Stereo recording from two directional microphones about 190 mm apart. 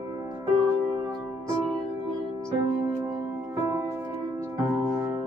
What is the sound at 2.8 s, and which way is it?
Music, 15° right (ahead or behind).